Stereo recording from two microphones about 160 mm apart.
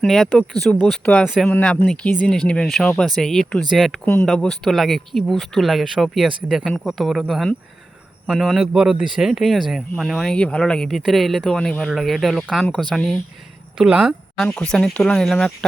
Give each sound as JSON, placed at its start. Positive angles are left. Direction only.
{"t": 0.0, "sound": "speech", "side_deg": 0}